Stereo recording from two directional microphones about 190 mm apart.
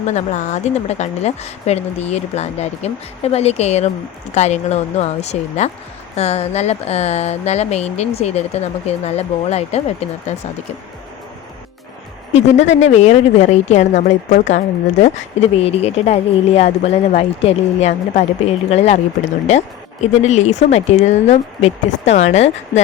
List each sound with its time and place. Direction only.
0.1 s speech: 40° left (ahead or behind)
12.3 s speech: 40° left (ahead or behind)